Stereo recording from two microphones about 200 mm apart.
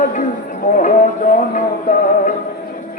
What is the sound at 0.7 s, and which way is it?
Music, 40° left (ahead or behind).